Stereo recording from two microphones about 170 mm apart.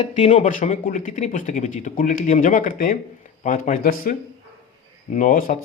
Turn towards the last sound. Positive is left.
turn(degrees=55)  # may be behind; listen again after turning